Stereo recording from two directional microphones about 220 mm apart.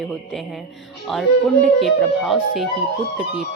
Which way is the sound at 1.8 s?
Centre (ahead or behind).